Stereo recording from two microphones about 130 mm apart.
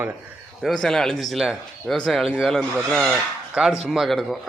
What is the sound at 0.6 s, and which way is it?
A man's voice, centre (ahead or behind).